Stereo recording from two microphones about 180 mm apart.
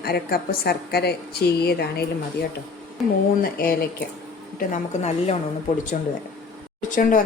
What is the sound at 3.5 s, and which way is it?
Speech, 55° left (ahead or behind).